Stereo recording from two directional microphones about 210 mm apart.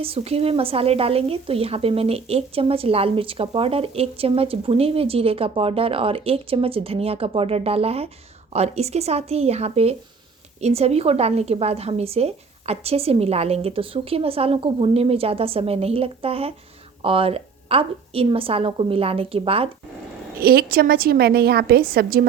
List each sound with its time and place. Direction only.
0.0 s speech: 30° right (ahead or behind)
20.4 s a woman's voice: 45° right (ahead or behind)